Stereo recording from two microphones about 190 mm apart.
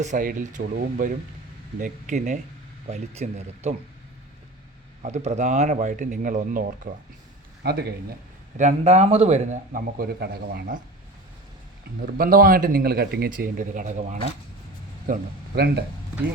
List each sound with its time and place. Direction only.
0.0 s a man's voice: 45° right (ahead or behind)
5.0 s a man's voice: 35° right (ahead or behind); by 7.9 s 55° right (ahead or behind)
8.5 s a man's voice: 35° right (ahead or behind); by 10.8 s 55° right (ahead or behind)
12.0 s speech: 50° right (ahead or behind)
15.5 s a man's voice: 60° right (ahead or behind)